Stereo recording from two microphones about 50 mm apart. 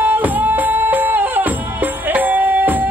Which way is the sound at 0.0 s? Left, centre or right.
Right.